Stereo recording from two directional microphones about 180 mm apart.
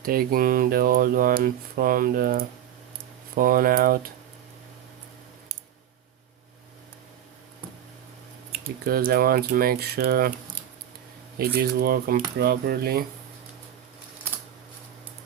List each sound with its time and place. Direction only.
0.0 s speech: 55° right (ahead or behind)
8.8 s speech: 55° right (ahead or behind)
11.3 s speech: 60° right (ahead or behind)